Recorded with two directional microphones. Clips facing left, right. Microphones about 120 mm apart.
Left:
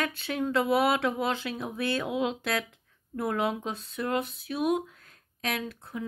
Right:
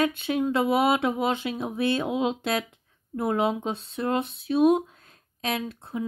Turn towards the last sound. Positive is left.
turn(degrees=-25)  # may be behind; listen again after turning